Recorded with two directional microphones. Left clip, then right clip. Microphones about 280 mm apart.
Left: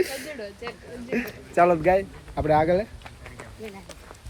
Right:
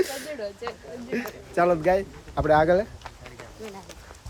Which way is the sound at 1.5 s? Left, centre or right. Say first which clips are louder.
Left 2 dB; centre.